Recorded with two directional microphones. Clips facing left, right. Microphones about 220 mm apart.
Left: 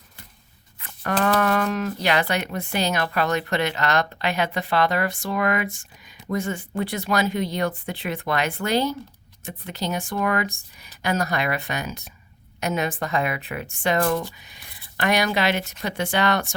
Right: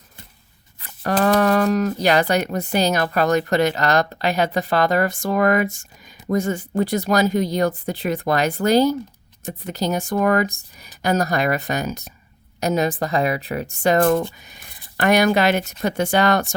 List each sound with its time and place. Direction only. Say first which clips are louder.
1.4 s speech: right 5 dB; 35° right (ahead or behind)